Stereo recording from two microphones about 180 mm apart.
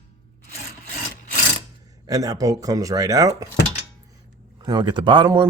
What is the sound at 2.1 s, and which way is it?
Speech, 20° right (ahead or behind).